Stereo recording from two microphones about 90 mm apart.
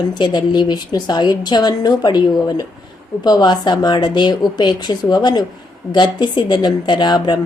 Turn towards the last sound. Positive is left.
turn(degrees=50)  # may be behind; listen again after turning